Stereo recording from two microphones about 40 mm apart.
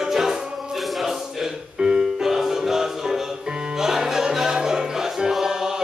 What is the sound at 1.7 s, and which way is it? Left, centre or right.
Music, centre.